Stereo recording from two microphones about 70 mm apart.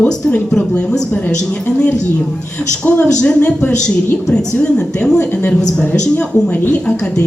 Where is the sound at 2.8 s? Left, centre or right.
Centre.